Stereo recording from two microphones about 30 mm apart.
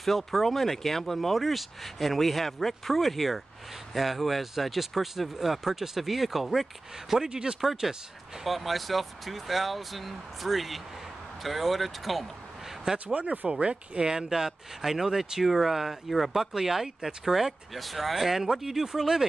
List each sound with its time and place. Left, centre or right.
0.0 s speech: centre
7.2 s speech: right
8.5 s speech: centre
12.9 s speech: right
13.5 s speech: right
14.0 s speech: right
17.7 s speech: centre